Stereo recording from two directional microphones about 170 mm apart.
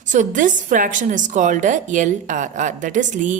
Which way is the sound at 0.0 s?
50° right (ahead or behind).